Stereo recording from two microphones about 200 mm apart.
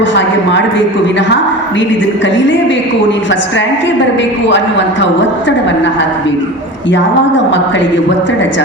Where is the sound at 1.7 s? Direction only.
65° left (ahead or behind).